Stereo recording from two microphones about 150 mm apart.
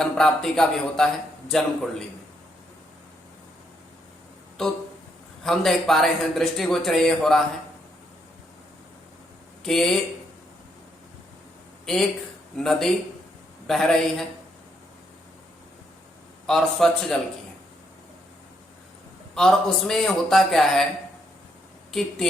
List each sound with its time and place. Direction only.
0.0 s a man's voice: 5° left (ahead or behind)
4.6 s a man's voice: 5° left (ahead or behind)
9.6 s a man's voice: centre (ahead or behind)
12.5 s a man's voice: centre (ahead or behind)
16.5 s a man's voice: centre (ahead or behind)
19.3 s a man's voice: 5° left (ahead or behind)